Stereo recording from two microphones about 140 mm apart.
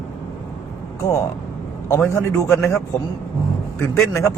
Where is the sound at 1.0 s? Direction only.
20° left (ahead or behind).